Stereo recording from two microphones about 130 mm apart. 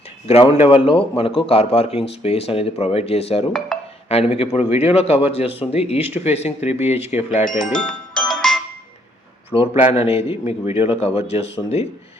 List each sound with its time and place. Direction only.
0.3 s speech: 50° left (ahead or behind)
7.7 s music: 5° left (ahead or behind)
9.8 s speech: 50° left (ahead or behind)